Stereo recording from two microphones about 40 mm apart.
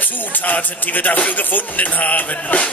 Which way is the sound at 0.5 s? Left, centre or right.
Left.